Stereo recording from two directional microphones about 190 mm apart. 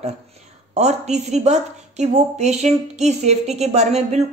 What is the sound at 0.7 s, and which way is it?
A woman's voice, 35° right (ahead or behind).